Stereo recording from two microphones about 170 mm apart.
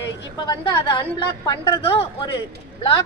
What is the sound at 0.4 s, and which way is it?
A woman's voice, 25° left (ahead or behind).